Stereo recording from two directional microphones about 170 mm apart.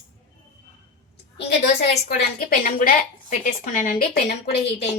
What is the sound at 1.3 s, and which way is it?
Speech, 75° left (ahead or behind).